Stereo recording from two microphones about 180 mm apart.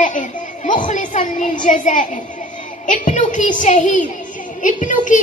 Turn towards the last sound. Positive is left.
turn(degrees=45)  # may be behind; listen again after turning